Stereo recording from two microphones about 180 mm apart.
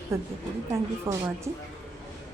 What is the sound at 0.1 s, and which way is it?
A woman's voice, 15° right (ahead or behind).